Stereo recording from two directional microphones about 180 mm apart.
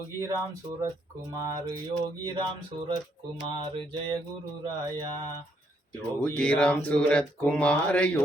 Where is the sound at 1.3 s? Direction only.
20° right (ahead or behind).